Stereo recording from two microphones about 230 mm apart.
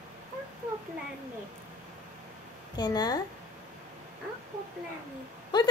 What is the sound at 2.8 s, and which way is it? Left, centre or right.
Speech, centre.